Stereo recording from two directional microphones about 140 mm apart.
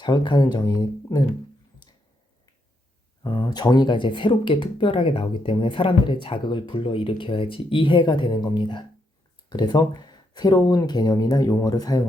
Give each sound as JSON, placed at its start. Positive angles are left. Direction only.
{"t": 0.0, "sound": "speech", "side_deg": 35}
{"t": 3.2, "sound": "speech", "side_deg": 35}